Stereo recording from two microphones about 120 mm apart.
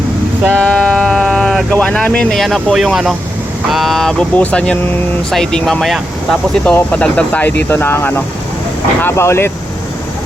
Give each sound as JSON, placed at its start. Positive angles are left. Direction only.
{"t": 0.6, "sound": "speech", "side_deg": 10}